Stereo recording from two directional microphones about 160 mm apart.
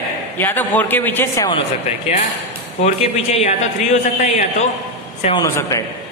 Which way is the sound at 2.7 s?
45° left (ahead or behind).